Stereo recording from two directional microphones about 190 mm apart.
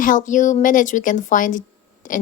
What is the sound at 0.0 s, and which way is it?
A woman's voice, 45° left (ahead or behind).